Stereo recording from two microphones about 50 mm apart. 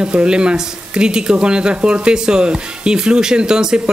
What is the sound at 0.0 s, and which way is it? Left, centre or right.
Speech, centre.